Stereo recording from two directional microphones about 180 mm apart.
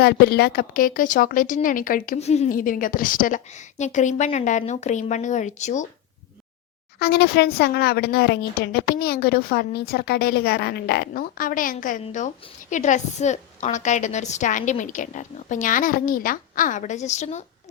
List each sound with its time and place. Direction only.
0.0 s a woman's voice: 60° left (ahead or behind)
2.1 s a woman's voice: 35° left (ahead or behind)
7.0 s a woman's voice: 65° left (ahead or behind); by 17.4 s 40° left (ahead or behind)